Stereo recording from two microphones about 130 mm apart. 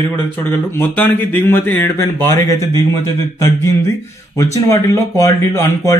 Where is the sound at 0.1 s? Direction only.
15° left (ahead or behind).